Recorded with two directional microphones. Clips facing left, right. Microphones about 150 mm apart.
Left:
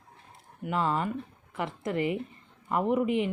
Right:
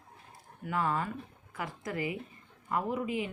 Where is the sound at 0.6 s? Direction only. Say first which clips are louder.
Left 3 dB; 25° left (ahead or behind).